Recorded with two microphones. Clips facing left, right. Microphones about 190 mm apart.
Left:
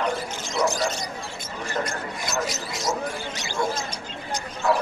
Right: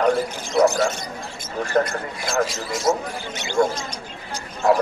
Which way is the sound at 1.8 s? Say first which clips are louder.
Right 8 dB; 50° right (ahead or behind).